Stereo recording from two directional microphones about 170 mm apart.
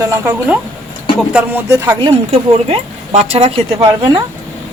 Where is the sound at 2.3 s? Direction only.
40° right (ahead or behind).